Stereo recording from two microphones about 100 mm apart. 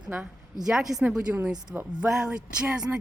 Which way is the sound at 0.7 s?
5° right (ahead or behind).